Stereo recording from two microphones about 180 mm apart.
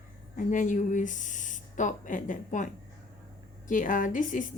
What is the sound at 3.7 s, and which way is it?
Speech, 45° left (ahead or behind).